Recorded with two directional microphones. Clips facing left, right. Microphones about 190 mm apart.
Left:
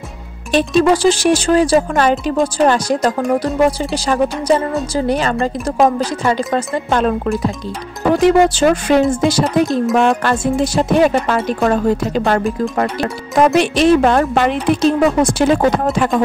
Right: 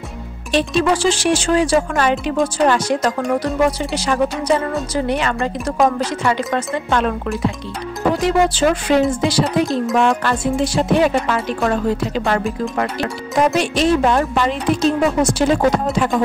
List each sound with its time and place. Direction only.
0.5 s a woman's voice: 45° left (ahead or behind)
8.1 s speech: 55° left (ahead or behind)
13.5 s a woman's voice: 65° left (ahead or behind)